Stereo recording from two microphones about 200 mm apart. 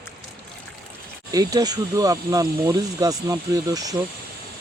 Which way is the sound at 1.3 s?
20° right (ahead or behind).